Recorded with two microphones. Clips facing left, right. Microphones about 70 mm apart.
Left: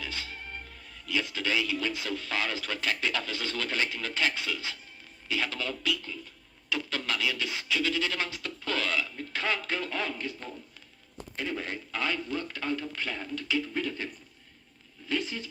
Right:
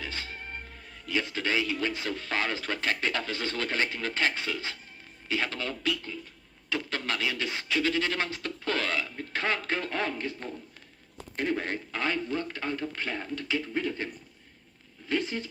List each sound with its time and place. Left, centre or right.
0.0 s a man's voice: right